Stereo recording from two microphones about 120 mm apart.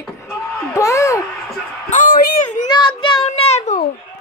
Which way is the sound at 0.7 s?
25° left (ahead or behind).